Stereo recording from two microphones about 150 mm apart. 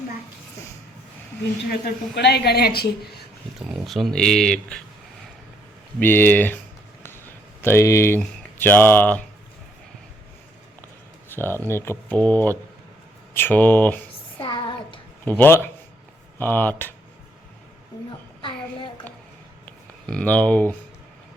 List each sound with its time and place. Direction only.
2.1 s a woman's voice: 90° left
3.7 s speech: centre (ahead or behind)
6.0 s speech: 15° left (ahead or behind)
7.0 s a sound: 15° left (ahead or behind)
11.3 s speech: 15° left (ahead or behind)
14.3 s child singing: 35° left (ahead or behind)
15.2 s speech: 10° left (ahead or behind)
20.1 s speech: 10° left (ahead or behind)